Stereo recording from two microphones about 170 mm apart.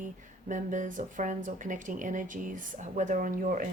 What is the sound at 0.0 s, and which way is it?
Speech, 50° right (ahead or behind).